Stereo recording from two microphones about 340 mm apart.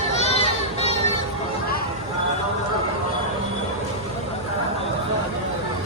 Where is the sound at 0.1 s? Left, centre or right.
Centre.